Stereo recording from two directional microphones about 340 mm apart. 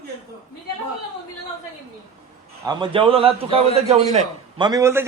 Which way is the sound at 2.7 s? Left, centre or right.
Centre.